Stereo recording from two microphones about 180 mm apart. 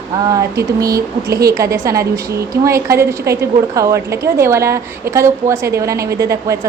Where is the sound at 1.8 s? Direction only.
15° right (ahead or behind).